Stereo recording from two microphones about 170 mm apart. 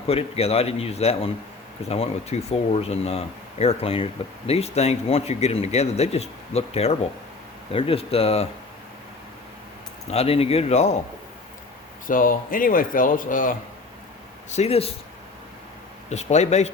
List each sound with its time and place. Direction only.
0.1 s speech: 35° left (ahead or behind)
10.1 s speech: 35° left (ahead or behind)
12.0 s speech: 55° left (ahead or behind)
14.5 s speech: 40° left (ahead or behind)
16.0 s speech: 40° left (ahead or behind)